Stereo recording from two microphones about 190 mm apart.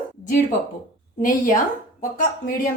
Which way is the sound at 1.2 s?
45° left (ahead or behind).